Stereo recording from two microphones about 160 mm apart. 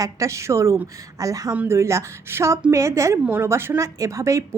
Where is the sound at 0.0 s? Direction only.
20° right (ahead or behind).